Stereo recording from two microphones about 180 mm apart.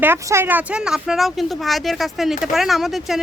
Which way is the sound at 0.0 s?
15° right (ahead or behind).